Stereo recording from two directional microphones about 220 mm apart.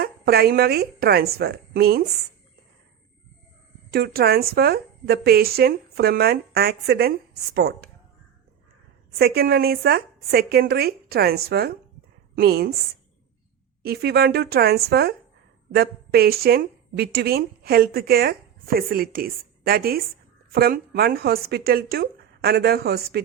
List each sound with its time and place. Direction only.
0.0 s a woman's voice: 45° right (ahead or behind)
3.9 s a woman's voice: 45° right (ahead or behind)
9.1 s a woman's voice: 45° right (ahead or behind)
13.8 s a woman's voice: 45° right (ahead or behind)